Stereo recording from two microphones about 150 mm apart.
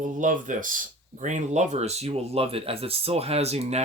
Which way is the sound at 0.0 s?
60° right (ahead or behind).